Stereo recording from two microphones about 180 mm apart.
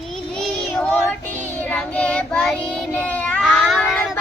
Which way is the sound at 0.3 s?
Centre (ahead or behind).